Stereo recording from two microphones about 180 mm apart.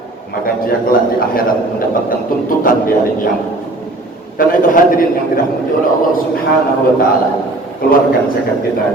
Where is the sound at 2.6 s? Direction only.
50° left (ahead or behind).